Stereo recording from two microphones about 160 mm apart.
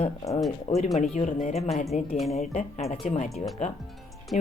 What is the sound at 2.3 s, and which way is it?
Speech, 40° left (ahead or behind).